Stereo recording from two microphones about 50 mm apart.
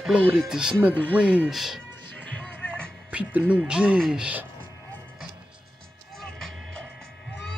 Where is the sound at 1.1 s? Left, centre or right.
Right.